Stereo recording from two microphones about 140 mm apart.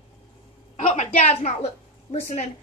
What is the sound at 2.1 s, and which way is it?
Speech, 55° left (ahead or behind).